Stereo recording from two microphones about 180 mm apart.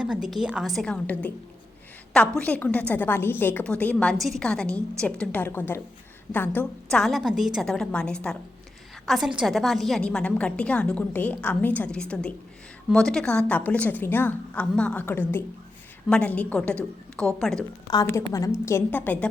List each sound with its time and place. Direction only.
0.0 s a woman's voice: 5° right (ahead or behind)
2.4 s a woman's voice: 10° left (ahead or behind)
18.0 s a woman's voice: 15° left (ahead or behind)